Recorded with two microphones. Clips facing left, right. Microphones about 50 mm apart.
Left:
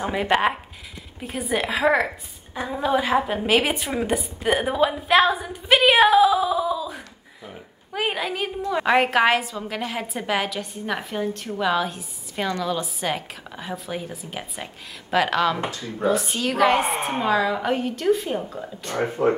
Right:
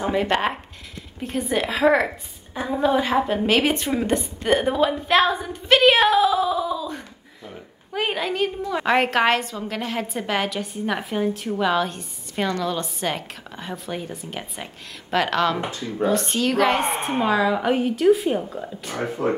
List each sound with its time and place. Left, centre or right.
0.0 s a woman's voice: centre
19.2 s speech: left